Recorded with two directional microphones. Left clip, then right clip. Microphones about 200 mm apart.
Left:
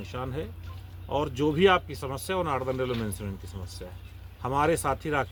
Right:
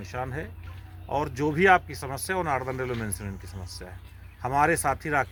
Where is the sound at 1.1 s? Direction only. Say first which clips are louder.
Even; 15° right (ahead or behind).